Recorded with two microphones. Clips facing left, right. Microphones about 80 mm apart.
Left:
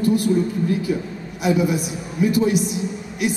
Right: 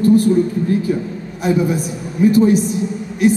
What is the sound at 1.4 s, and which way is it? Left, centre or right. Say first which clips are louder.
A woman's voice: right 2 dB; right.